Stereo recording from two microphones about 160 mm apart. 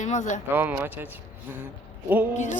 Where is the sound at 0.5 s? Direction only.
10° right (ahead or behind).